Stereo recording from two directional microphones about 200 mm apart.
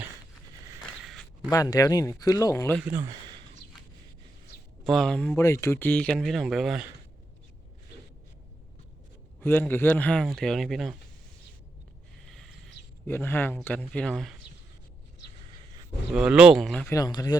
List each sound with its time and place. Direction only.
1.0 s zipper: centre (ahead or behind)
1.5 s speech: 20° left (ahead or behind)
3.0 s speech: 25° right (ahead or behind)
4.8 s speech: centre (ahead or behind)
9.4 s speech: 10° left (ahead or behind)
13.1 s speech: 10° left (ahead or behind)
16.1 s speech: 5° right (ahead or behind)
16.9 s speech: 20° left (ahead or behind)